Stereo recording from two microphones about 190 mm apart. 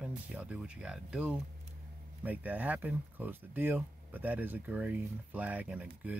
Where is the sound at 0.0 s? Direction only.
5° right (ahead or behind).